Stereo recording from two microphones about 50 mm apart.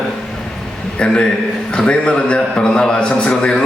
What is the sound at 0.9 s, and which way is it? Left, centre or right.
A man's voice, centre.